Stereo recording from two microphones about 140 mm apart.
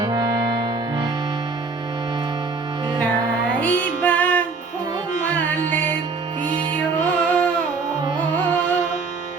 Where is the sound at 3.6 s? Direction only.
10° left (ahead or behind).